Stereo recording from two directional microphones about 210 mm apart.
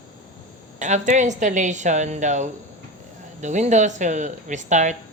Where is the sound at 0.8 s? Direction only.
35° right (ahead or behind).